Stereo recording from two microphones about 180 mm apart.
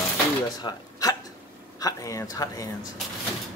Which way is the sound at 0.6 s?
20° left (ahead or behind).